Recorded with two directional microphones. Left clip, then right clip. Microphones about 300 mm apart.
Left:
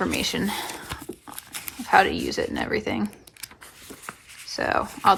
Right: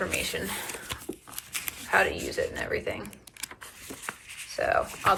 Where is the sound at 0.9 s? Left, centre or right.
Centre.